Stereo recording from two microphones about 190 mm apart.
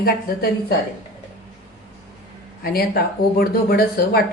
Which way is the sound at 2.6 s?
55° left (ahead or behind).